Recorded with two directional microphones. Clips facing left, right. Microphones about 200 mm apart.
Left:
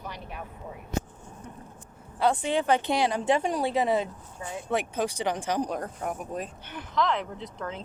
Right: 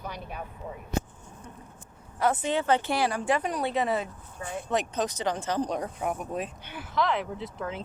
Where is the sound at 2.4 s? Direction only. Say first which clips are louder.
Left 1 dB; 15° left (ahead or behind).